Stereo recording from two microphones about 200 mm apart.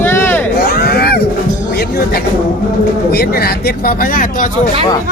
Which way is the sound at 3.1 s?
50° left (ahead or behind).